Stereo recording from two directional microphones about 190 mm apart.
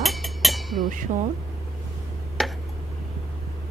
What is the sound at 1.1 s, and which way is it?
Speech, 35° right (ahead or behind).